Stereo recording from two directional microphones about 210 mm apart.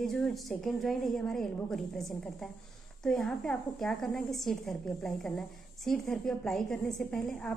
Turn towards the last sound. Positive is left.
turn(degrees=5)  # may be behind; listen again after turning